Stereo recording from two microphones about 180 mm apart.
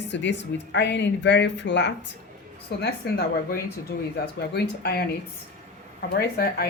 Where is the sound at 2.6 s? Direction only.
60° left (ahead or behind).